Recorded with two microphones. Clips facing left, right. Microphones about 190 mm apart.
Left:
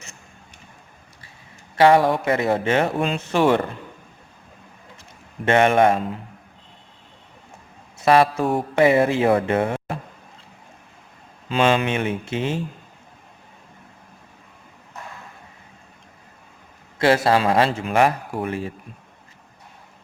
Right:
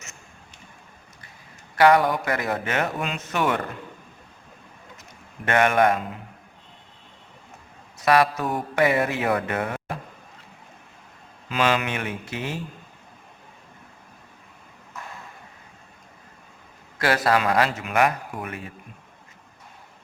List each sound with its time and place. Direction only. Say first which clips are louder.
1.7 s speech: left 3 dB; 25° left (ahead or behind)
5.5 s speech: left 4 dB; 25° left (ahead or behind)
7.9 s speech: left 3 dB; 25° left (ahead or behind)
11.4 s speech: left 4 dB; 25° left (ahead or behind)
17.0 s speech: left 4 dB; 25° left (ahead or behind)